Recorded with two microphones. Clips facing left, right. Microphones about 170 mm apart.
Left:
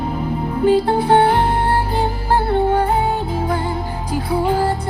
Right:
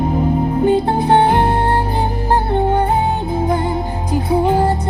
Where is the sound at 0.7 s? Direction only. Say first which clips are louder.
Left 2 dB; 20° right (ahead or behind).